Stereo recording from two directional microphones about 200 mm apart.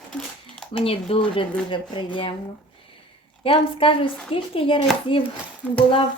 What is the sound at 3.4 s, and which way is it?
Speech, 25° left (ahead or behind).